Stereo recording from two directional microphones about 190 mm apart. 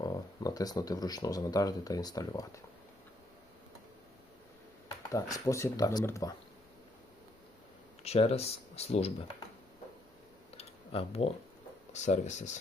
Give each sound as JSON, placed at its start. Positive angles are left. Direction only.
{"t": 0.0, "sound": "speech", "side_deg": 20}
{"t": 5.1, "sound": "speech", "side_deg": 15}
{"t": 8.0, "sound": "speech", "side_deg": 35}
{"t": 10.6, "sound": "computer keyboard", "side_deg": 30}
{"t": 11.9, "sound": "speech", "side_deg": 40}